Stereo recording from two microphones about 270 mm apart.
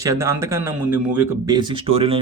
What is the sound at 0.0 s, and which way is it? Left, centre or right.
Speech, centre.